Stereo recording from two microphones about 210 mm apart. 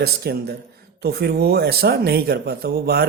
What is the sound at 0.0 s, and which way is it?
A man's voice, 50° right (ahead or behind).